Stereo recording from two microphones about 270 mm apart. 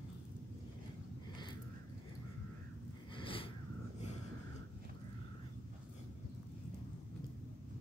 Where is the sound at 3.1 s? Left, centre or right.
Centre.